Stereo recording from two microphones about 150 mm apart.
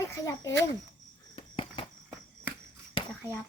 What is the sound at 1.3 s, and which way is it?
Cricket, 35° left (ahead or behind).